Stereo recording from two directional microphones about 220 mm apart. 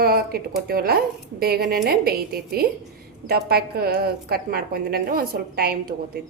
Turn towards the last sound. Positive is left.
turn(degrees=-45)  # may be behind; listen again after turning